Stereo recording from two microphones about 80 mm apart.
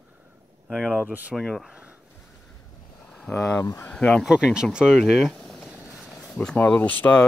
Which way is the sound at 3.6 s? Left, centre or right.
Left.